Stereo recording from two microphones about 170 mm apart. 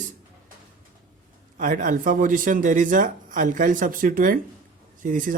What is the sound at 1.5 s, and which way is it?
Speech, 50° right (ahead or behind).